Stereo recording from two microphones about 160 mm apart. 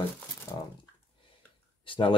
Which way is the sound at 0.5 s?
20° left (ahead or behind).